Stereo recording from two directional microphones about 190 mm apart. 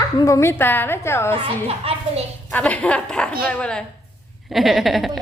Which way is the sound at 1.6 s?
30° right (ahead or behind).